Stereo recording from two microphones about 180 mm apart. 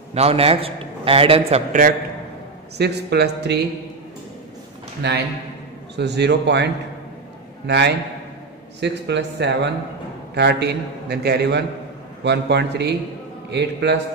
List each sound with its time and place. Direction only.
0.1 s a man's voice: 35° right (ahead or behind)
1.7 s a man's voice: 50° right (ahead or behind)
2.8 s a man's voice: 65° right (ahead or behind)
5.0 s a man's voice: 70° right (ahead or behind)